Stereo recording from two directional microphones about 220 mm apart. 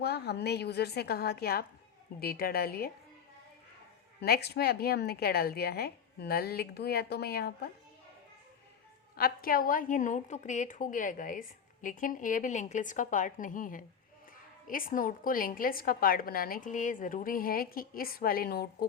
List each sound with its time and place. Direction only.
0.0 s a woman's voice: 50° left (ahead or behind)
4.2 s a woman's voice: 45° left (ahead or behind)
9.1 s a woman's voice: 40° left (ahead or behind)